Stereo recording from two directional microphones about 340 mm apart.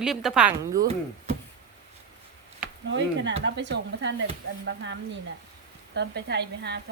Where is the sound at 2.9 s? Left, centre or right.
Right.